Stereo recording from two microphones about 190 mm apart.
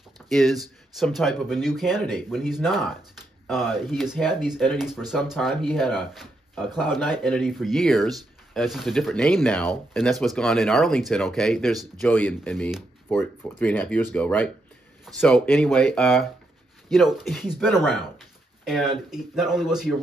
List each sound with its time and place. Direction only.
0.3 s speech: centre (ahead or behind)